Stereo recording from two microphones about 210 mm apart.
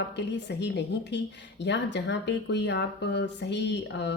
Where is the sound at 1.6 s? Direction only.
55° left (ahead or behind).